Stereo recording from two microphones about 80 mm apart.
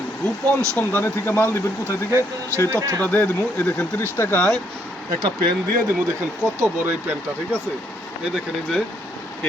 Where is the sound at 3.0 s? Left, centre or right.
Left.